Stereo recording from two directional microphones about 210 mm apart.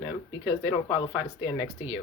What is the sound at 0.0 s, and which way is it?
Speech, 25° left (ahead or behind).